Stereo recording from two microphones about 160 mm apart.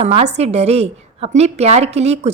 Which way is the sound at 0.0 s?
40° right (ahead or behind).